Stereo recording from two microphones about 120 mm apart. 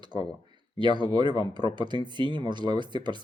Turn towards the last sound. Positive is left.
turn(degrees=-40)  # may be behind; listen again after turning